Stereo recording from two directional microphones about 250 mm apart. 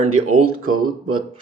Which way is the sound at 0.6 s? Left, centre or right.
Right.